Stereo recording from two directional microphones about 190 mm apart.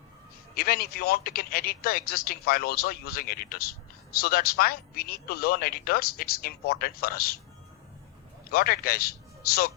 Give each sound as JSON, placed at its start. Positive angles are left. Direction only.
{"t": 0.5, "sound": "speech", "side_deg": 50}
{"t": 8.4, "sound": "a man's voice", "side_deg": 50}